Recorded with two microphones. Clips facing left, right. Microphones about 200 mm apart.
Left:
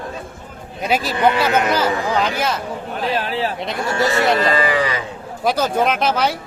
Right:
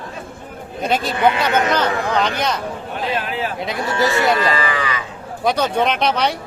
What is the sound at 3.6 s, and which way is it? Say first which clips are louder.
Speech: even; centre (ahead or behind).